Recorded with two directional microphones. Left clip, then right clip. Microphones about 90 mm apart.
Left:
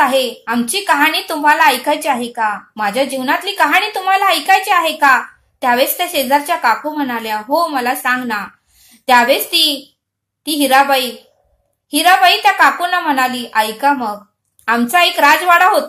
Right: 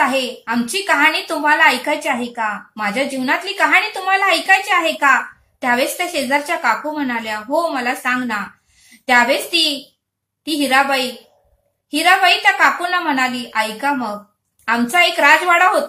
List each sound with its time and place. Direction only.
0.0 s a woman's voice: 35° left (ahead or behind)
12.6 s a woman's voice: 25° left (ahead or behind)